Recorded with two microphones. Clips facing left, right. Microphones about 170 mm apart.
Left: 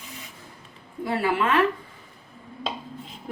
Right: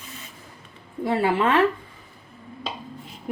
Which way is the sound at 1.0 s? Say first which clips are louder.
Right 3 dB; 30° right (ahead or behind).